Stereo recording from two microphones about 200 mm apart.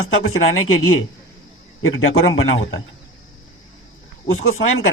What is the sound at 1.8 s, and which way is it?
A man's voice, 90° left.